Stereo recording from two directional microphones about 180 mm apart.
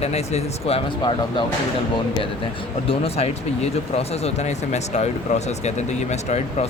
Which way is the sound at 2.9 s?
35° left (ahead or behind).